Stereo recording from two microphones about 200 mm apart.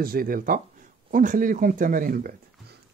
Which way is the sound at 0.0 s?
45° right (ahead or behind).